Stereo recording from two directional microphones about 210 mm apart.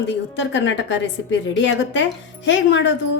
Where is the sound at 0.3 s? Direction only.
60° left (ahead or behind).